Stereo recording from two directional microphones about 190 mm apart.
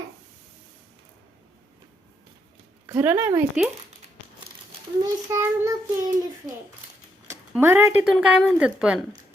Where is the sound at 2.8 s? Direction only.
10° right (ahead or behind).